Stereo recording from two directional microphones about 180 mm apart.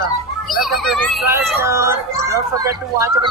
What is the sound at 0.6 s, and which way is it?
Speech, centre (ahead or behind).